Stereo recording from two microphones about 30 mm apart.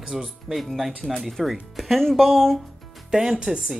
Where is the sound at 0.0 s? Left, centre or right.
Right.